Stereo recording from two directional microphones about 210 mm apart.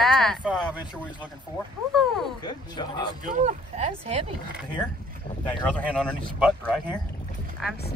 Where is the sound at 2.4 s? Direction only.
20° left (ahead or behind).